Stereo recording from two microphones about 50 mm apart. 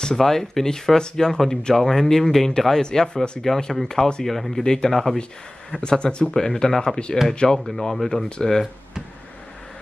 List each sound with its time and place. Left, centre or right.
0.0 s speech: centre